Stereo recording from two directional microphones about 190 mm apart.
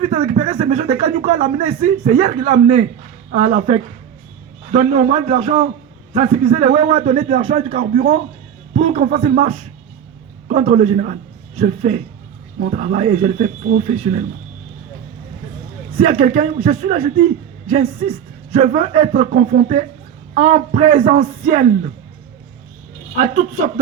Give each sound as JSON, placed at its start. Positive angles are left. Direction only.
{"t": 0.0, "sound": "a sound", "side_deg": -30}
{"t": 0.5, "sound": "a man's voice", "side_deg": -25}
{"t": 16.0, "sound": "a man's voice", "side_deg": -35}